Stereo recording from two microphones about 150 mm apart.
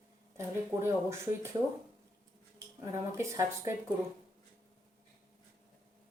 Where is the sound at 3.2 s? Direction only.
20° right (ahead or behind).